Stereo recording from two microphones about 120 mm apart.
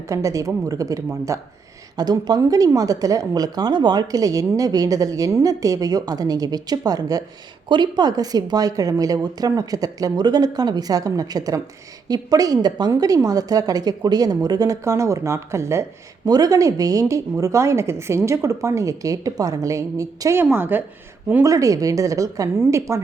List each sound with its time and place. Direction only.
0.1 s a woman's voice: 25° right (ahead or behind)
20.4 s a woman's voice: 15° right (ahead or behind)
21.4 s a woman's voice: 30° right (ahead or behind)